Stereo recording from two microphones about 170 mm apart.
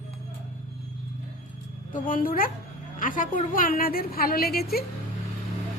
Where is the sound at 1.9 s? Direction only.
55° left (ahead or behind).